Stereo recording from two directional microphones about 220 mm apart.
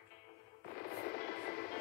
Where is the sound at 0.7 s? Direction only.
45° left (ahead or behind).